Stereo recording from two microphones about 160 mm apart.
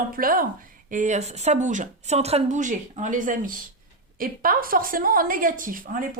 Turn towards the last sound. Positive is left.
turn(degrees=-60)  # may be behind; listen again after turning